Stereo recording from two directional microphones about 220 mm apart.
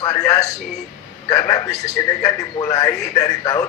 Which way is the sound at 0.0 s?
15° left (ahead or behind).